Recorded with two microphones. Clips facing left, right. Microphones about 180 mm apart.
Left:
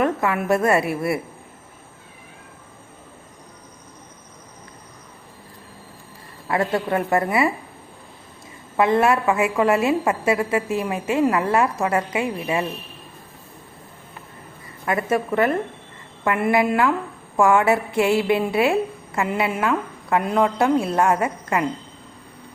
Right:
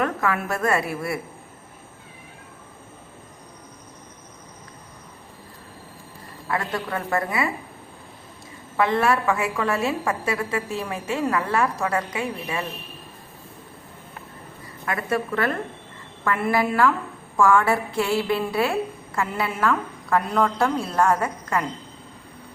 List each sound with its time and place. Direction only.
0.0 s a woman's voice: 25° left (ahead or behind)
6.5 s a woman's voice: 25° left (ahead or behind)
8.7 s a woman's voice: 25° left (ahead or behind)
14.8 s a woman's voice: 20° left (ahead or behind)